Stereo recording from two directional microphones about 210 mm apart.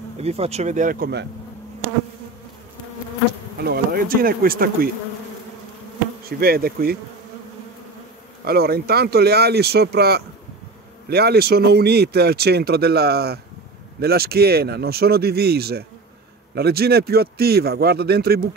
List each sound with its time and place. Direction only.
0.2 s speech: 30° right (ahead or behind); by 1.2 s 45° right (ahead or behind)
3.5 s speech: 50° right (ahead or behind)
6.2 s speech: 45° right (ahead or behind)
8.5 s speech: 50° right (ahead or behind)